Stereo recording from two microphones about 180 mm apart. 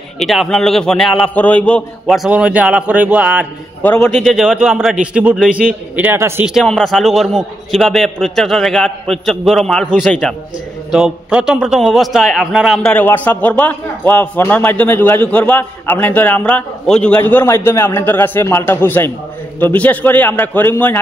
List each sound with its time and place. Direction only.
0.2 s a man's voice: centre (ahead or behind)
3.8 s a man's voice: 10° left (ahead or behind); by 6.5 s 15° right (ahead or behind)
6.5 s a man's voice: centre (ahead or behind)